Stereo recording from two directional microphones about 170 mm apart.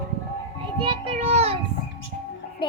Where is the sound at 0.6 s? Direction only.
30° right (ahead or behind).